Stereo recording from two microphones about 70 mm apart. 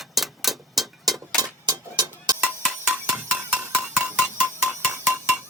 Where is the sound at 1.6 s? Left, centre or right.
Right.